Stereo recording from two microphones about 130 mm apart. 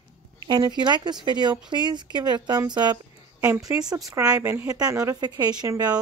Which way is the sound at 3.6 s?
30° right (ahead or behind).